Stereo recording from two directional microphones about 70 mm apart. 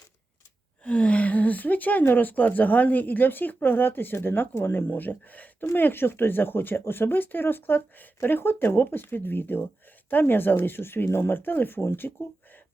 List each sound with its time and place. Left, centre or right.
0.9 s speech: centre; by 12.1 s left